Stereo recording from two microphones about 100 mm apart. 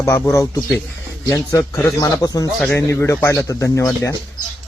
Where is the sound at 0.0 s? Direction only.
25° left (ahead or behind).